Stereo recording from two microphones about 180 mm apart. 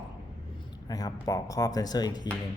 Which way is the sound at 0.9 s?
20° left (ahead or behind).